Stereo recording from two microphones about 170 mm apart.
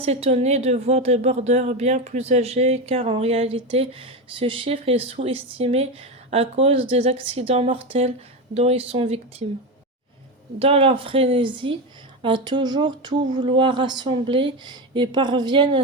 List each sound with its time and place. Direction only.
0.0 s a woman's voice: 35° right (ahead or behind)
10.6 s a woman's voice: 35° right (ahead or behind)